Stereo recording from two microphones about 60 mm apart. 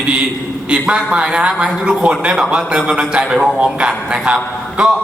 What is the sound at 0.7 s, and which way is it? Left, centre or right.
A man's voice, centre.